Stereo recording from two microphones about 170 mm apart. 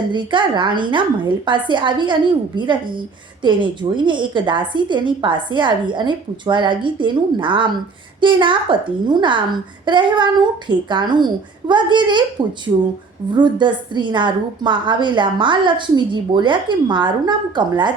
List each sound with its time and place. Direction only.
0.1 s a woman's voice: 30° right (ahead or behind)
3.4 s a woman's voice: 30° right (ahead or behind)
13.3 s a woman's voice: 25° right (ahead or behind)